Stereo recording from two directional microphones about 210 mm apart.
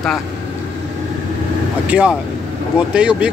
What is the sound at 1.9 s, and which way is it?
Speech, 5° right (ahead or behind).